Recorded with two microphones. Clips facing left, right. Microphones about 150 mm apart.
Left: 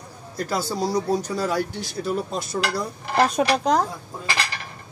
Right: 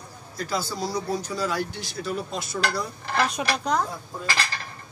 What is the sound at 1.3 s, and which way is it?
Speech, 50° left (ahead or behind).